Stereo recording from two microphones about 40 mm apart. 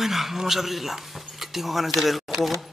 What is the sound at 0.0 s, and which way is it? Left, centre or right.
Speech, centre.